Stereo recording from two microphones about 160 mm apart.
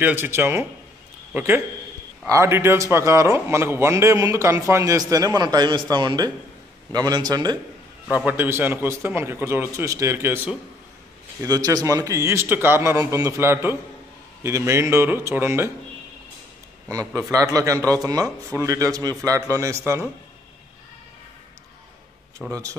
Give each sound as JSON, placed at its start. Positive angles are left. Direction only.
{"t": 0.0, "sound": "a man's voice", "side_deg": -15}
{"t": 8.3, "sound": "a man's voice", "side_deg": -15}
{"t": 17.3, "sound": "a man's voice", "side_deg": -20}
{"t": 22.5, "sound": "a man's voice", "side_deg": -20}